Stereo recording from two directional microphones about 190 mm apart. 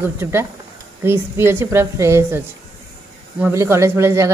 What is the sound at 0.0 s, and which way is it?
Speech, 10° right (ahead or behind).